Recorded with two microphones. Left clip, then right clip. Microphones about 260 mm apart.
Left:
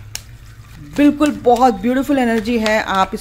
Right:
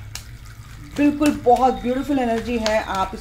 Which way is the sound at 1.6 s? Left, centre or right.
Left.